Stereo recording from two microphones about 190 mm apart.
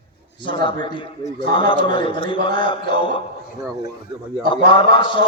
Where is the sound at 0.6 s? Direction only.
25° left (ahead or behind).